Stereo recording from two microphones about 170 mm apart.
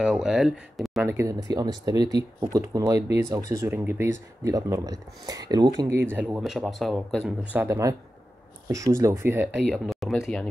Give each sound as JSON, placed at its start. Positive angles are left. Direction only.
{"t": 0.0, "sound": "speech", "side_deg": -5}
{"t": 1.0, "sound": "speech", "side_deg": -15}
{"t": 6.1, "sound": "speech", "side_deg": -5}
{"t": 7.6, "sound": "speech", "side_deg": -20}
{"t": 9.5, "sound": "speech", "side_deg": 0}